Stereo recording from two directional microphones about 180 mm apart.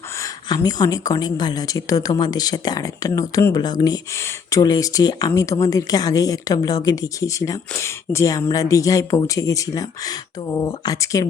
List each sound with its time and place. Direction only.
0.2 s a woman's voice: 20° left (ahead or behind)